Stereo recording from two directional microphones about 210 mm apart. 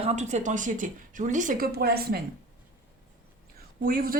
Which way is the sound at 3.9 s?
45° right (ahead or behind).